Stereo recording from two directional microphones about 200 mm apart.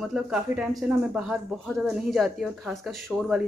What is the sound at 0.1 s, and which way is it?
Speech, centre (ahead or behind).